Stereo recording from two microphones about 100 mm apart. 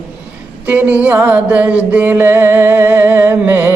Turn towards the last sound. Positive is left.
turn(degrees=-20)  # may be behind; listen again after turning